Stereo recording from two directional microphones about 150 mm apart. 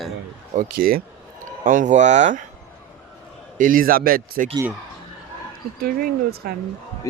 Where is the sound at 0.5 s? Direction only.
75° right (ahead or behind).